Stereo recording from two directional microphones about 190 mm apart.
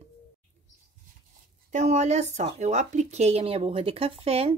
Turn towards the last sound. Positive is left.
turn(degrees=-30)  # may be behind; listen again after turning